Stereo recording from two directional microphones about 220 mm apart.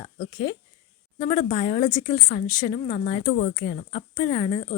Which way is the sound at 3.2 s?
40° left (ahead or behind).